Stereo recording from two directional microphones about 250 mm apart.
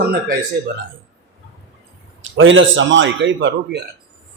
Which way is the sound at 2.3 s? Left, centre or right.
Right.